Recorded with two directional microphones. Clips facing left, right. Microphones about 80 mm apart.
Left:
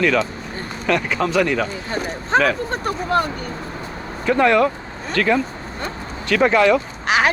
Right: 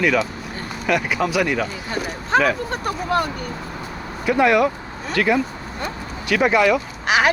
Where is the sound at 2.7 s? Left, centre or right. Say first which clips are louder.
Left 2 dB; left.